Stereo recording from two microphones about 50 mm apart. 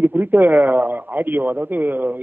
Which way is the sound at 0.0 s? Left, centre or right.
Right.